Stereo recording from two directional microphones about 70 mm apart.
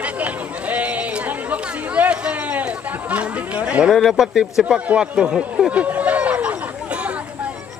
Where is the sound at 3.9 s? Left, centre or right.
Centre.